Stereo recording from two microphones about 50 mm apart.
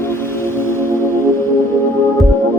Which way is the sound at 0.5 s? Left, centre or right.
Left.